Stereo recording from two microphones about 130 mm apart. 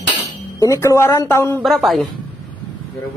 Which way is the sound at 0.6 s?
25° left (ahead or behind).